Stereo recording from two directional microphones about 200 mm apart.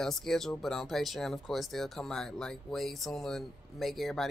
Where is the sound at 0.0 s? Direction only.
Centre (ahead or behind).